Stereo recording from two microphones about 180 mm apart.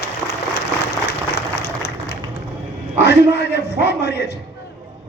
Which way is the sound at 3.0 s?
65° left (ahead or behind).